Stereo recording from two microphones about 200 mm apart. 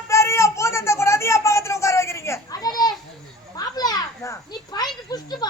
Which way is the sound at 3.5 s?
20° left (ahead or behind).